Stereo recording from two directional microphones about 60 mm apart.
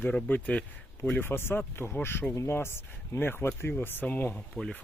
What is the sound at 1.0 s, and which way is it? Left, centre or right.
Speech, left.